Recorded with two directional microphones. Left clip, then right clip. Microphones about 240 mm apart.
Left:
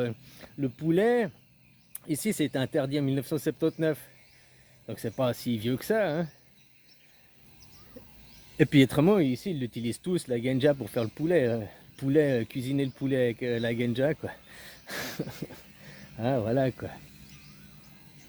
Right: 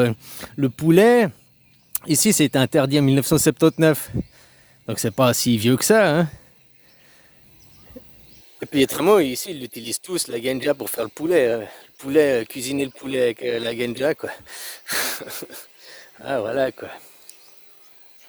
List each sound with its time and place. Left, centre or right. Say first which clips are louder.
0.0 s speech: right 12 dB; right
8.6 s speech: right 4 dB; right